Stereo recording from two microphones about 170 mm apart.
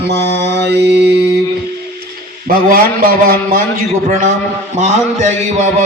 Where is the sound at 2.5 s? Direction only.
60° right (ahead or behind).